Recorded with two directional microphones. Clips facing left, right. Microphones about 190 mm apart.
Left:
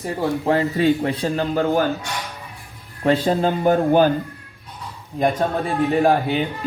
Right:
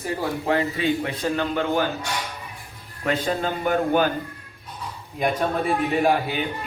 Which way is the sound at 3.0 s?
30° left (ahead or behind).